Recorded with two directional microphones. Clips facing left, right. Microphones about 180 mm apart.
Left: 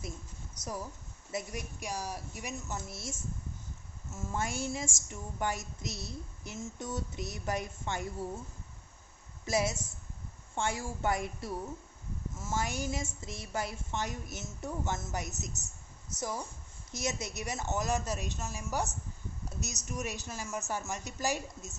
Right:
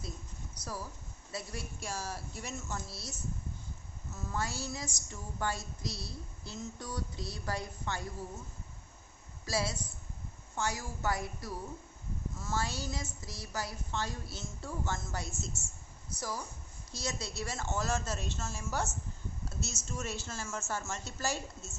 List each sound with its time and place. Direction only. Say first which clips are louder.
0.6 s a woman's voice: left 3 dB; 20° left (ahead or behind)
9.5 s a woman's voice: left 4 dB; 20° left (ahead or behind)